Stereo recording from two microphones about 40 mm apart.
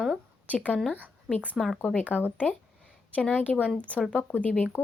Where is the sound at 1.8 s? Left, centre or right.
Left.